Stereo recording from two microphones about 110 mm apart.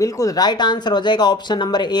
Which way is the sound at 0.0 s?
30° left (ahead or behind).